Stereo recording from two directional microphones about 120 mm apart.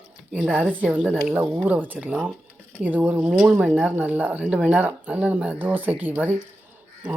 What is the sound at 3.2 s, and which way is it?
Speech, 5° right (ahead or behind).